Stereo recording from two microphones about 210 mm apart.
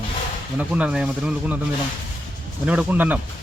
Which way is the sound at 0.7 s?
5° right (ahead or behind).